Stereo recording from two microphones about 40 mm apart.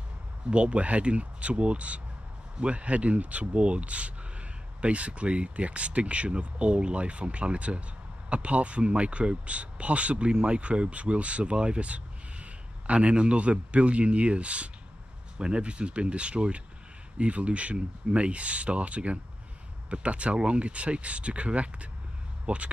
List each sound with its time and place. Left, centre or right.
0.5 s speech: right